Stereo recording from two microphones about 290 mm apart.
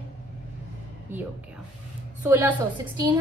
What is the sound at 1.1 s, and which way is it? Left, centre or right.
A woman's voice, centre.